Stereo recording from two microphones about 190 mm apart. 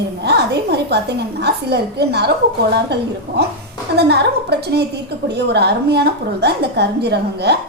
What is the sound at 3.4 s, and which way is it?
A woman's voice, 60° right (ahead or behind).